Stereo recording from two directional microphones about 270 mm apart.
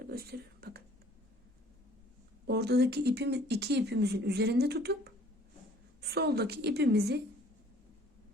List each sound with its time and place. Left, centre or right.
0.1 s speech: right
2.5 s speech: right